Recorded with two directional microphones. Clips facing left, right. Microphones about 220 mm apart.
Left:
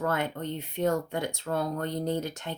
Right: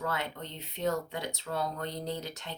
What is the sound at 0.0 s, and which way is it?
Speech, 50° left (ahead or behind).